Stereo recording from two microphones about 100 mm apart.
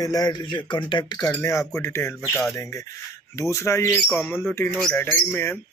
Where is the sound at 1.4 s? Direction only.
30° left (ahead or behind).